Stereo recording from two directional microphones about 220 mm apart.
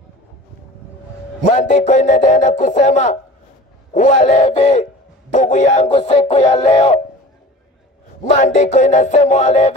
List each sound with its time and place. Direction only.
1.5 s music: 35° left (ahead or behind)
8.2 s music: 30° left (ahead or behind)